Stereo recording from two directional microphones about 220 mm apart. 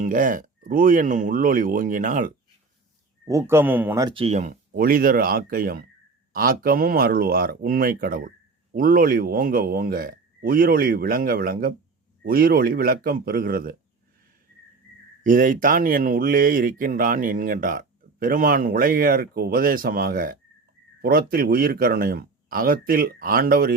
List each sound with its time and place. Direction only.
0.0 s speech: 35° right (ahead or behind)
3.2 s speech: 10° right (ahead or behind); by 13.7 s 40° right (ahead or behind)
15.2 s speech: 40° right (ahead or behind)